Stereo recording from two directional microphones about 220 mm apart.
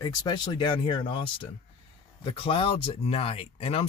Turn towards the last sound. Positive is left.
turn(degrees=25)  # may be behind; listen again after turning